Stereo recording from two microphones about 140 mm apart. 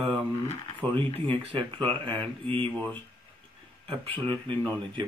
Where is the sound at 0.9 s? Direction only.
35° right (ahead or behind).